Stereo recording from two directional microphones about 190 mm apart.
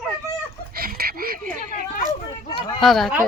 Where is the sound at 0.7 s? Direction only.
50° right (ahead or behind).